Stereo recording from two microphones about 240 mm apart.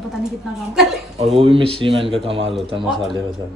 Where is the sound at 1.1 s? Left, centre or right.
Right.